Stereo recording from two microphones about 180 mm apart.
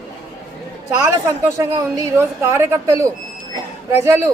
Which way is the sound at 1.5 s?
20° right (ahead or behind).